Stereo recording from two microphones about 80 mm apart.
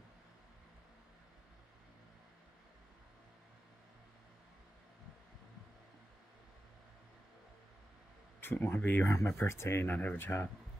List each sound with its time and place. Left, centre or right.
8.4 s speech: left
9.0 s speech: left